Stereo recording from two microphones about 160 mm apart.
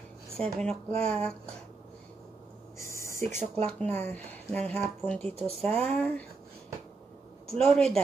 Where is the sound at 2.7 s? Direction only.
15° left (ahead or behind).